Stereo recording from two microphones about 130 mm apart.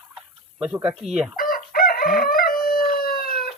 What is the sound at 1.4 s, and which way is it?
Crowing, 90° left.